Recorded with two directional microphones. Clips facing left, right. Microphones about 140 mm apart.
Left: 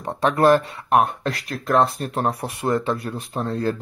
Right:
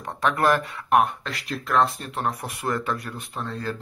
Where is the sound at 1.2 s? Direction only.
45° left (ahead or behind).